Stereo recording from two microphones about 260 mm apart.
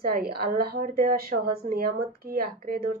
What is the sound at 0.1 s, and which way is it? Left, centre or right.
Speech, right.